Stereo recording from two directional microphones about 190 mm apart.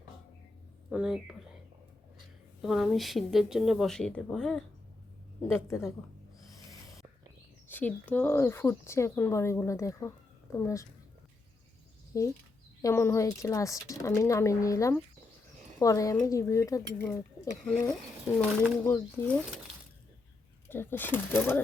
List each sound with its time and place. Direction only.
0.9 s speech: 5° right (ahead or behind)
2.6 s speech: centre (ahead or behind)
7.7 s speech: 10° left (ahead or behind)
12.1 s speech: 15° left (ahead or behind)
20.7 s speech: 10° left (ahead or behind)